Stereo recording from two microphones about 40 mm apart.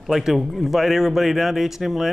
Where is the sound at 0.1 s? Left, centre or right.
Centre.